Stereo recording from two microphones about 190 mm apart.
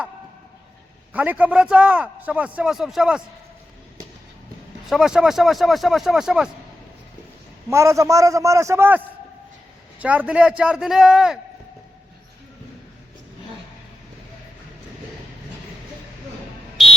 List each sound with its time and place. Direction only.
1.1 s a man's voice: 10° right (ahead or behind)
4.9 s speech: centre (ahead or behind)
7.7 s a man's voice: 15° right (ahead or behind)
16.8 s fire alarm: centre (ahead or behind)